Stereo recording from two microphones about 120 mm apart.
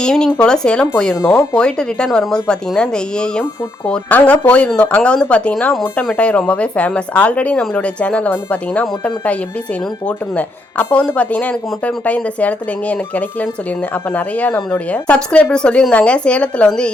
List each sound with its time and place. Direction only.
0.0 s speech: 5° left (ahead or behind)
1.2 s speech: 20° left (ahead or behind)
1.5 s speech: 5° left (ahead or behind)